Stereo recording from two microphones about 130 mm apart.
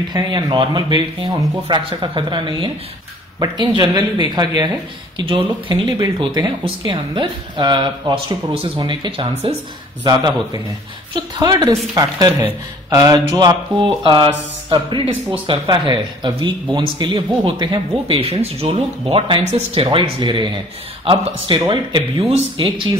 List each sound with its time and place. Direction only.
0.1 s speech: 35° right (ahead or behind)
10.0 s speech: 30° right (ahead or behind)
21.5 s speech: 30° right (ahead or behind)
22.4 s speech: 40° right (ahead or behind)